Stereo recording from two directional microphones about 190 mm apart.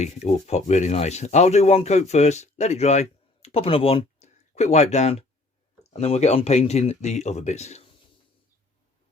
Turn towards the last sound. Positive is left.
turn(degrees=35)  # may be behind; listen again after turning